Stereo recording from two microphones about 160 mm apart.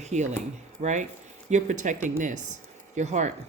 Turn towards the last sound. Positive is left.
turn(degrees=-50)  # may be behind; listen again after turning